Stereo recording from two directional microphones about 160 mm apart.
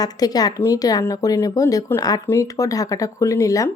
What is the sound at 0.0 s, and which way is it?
Speech, 25° left (ahead or behind).